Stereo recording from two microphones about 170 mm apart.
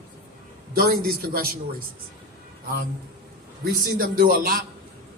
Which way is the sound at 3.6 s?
55° right (ahead or behind).